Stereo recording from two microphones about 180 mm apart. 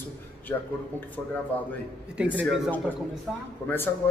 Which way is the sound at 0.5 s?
15° left (ahead or behind).